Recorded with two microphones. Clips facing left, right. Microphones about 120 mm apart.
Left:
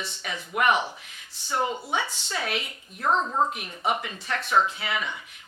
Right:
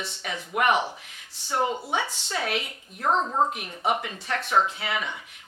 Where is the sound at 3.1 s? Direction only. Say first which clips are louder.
Right 1 dB; 25° right (ahead or behind).